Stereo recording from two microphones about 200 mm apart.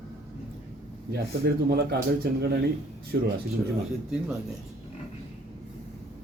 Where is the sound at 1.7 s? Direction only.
55° right (ahead or behind).